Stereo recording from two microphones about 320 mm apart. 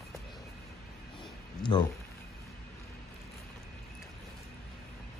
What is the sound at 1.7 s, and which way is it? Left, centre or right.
Speech, centre.